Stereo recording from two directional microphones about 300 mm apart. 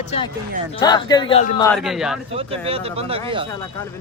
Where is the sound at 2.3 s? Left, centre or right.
Centre.